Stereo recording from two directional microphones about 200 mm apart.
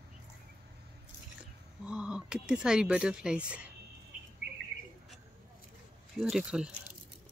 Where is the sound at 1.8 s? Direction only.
5° right (ahead or behind).